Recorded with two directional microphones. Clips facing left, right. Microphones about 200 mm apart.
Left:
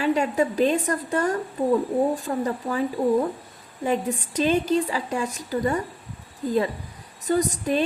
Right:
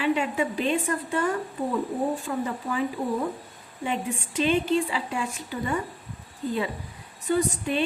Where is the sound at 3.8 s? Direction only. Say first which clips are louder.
Left 5 dB; 40° left (ahead or behind).